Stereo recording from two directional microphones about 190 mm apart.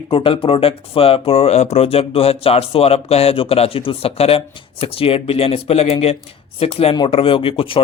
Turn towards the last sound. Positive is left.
turn(degrees=30)  # may be behind; listen again after turning